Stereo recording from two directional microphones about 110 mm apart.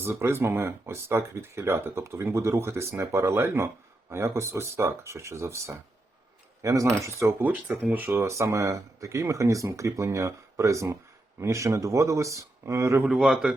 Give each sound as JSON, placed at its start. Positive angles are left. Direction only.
{"t": 0.0, "sound": "speech", "side_deg": -25}
{"t": 7.4, "sound": "speech", "side_deg": -15}
{"t": 13.1, "sound": "speech", "side_deg": 0}